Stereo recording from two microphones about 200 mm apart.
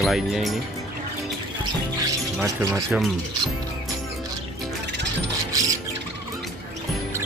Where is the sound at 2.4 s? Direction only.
15° right (ahead or behind).